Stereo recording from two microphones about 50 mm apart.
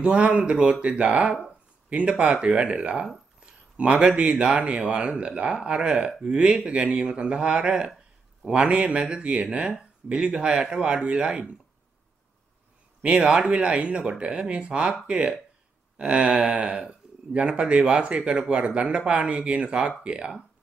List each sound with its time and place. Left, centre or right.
0.0 s speech: right
3.3 s a sound: right
4.1 s speech: centre
13.3 s speech: centre